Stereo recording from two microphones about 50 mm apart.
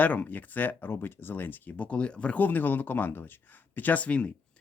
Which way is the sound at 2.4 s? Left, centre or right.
Left.